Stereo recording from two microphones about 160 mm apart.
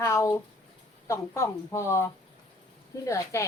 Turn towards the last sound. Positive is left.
turn(degrees=20)  # may be behind; listen again after turning